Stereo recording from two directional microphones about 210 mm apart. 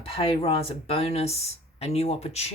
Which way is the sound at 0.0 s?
25° left (ahead or behind).